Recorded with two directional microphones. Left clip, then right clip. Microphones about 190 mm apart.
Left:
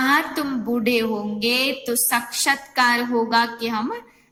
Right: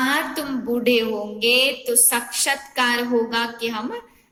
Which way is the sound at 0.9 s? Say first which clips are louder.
Right 3 dB; 45° left (ahead or behind).